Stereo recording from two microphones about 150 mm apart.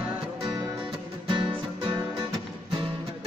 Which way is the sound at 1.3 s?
35° right (ahead or behind).